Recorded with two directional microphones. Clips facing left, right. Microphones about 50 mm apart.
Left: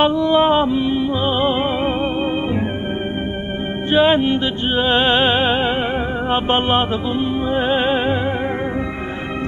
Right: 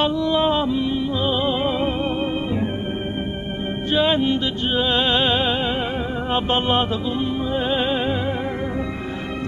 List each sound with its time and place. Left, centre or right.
0.0 s music: left
3.9 s music: left